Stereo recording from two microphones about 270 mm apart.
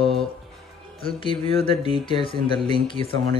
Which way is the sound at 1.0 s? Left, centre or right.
Centre.